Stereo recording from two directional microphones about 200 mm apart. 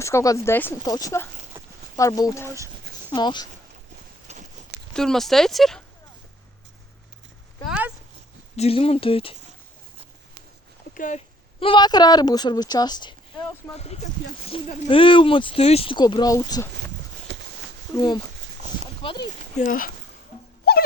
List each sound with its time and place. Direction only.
0.0 s speech: 15° left (ahead or behind)
1.5 s a sound: 10° right (ahead or behind)
2.0 s speech: 15° left (ahead or behind)
4.3 s walk: 35° right (ahead or behind)
4.9 s speech: centre (ahead or behind)
7.7 s a sound: 5° right (ahead or behind)
8.5 s speech: 30° left (ahead or behind)
10.9 s speech: 40° left (ahead or behind)
11.6 s speech: 25° left (ahead or behind)
17.3 s a sound: 60° right (ahead or behind)
17.9 s speech: 20° left (ahead or behind)
19.5 s speech: 45° left (ahead or behind)
20.7 s a sound: 50° left (ahead or behind)